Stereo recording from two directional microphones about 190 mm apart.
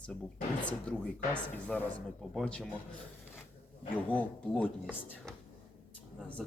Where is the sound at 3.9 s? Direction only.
10° left (ahead or behind).